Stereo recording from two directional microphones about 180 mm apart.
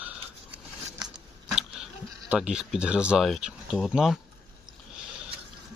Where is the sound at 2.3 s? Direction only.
5° right (ahead or behind).